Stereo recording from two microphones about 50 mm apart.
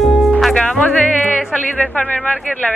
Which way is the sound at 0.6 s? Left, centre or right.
Centre.